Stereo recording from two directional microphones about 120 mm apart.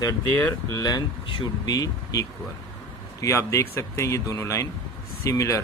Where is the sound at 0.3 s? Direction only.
25° left (ahead or behind).